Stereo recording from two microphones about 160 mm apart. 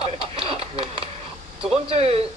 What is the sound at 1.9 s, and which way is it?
Speech, 40° right (ahead or behind).